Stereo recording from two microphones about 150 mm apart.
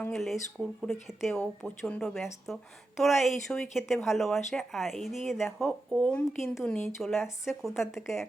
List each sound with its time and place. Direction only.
0.1 s speech: centre (ahead or behind)